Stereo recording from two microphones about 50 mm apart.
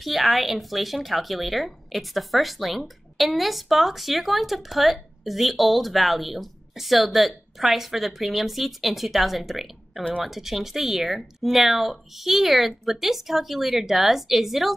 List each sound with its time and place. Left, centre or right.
0.0 s speech: centre